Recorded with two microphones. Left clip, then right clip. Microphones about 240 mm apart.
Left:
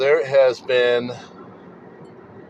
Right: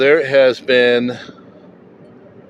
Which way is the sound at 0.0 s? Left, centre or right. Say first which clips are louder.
Right 4 dB; right.